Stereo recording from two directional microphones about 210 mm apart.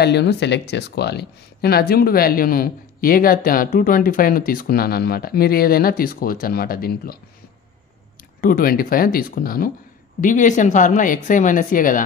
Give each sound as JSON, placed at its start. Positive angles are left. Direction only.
{"t": 0.0, "sound": "speech", "side_deg": 55}
{"t": 8.4, "sound": "speech", "side_deg": 45}